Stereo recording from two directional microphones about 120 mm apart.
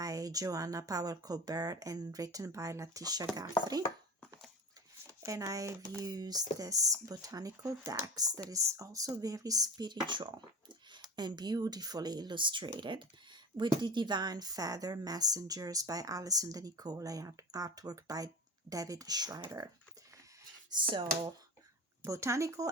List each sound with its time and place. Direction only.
0.0 s speech: 30° right (ahead or behind)
5.2 s a woman's voice: 25° right (ahead or behind)
20.7 s speech: 40° right (ahead or behind)
22.0 s speech: 25° right (ahead or behind)